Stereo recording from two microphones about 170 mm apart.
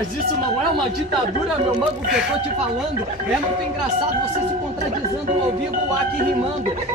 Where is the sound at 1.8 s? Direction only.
Centre (ahead or behind).